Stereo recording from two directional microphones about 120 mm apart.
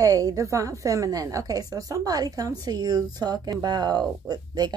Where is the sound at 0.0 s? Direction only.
30° right (ahead or behind).